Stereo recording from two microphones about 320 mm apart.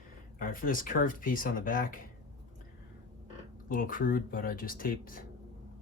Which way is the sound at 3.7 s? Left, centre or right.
Left.